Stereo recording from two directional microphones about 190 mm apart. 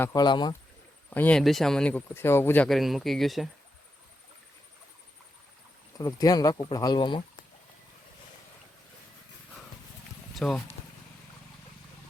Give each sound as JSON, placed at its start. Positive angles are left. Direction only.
{"t": 0.0, "sound": "speech", "side_deg": 20}
{"t": 1.1, "sound": "speech", "side_deg": 10}
{"t": 6.0, "sound": "speech", "side_deg": 20}
{"t": 10.3, "sound": "speech", "side_deg": 5}